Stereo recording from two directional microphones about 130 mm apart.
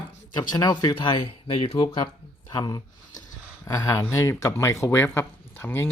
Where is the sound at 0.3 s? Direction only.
30° left (ahead or behind).